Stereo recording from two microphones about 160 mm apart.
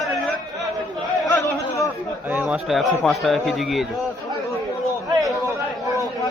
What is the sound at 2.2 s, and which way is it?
A man's voice, 10° right (ahead or behind).